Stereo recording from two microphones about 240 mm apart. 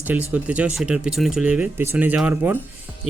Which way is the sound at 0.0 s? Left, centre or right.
Centre.